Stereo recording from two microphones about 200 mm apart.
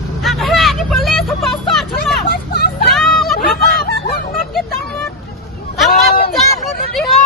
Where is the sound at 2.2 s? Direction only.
50° left (ahead or behind).